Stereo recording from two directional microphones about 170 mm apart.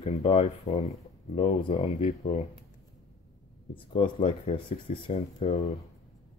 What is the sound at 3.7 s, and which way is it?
Speech, 30° left (ahead or behind).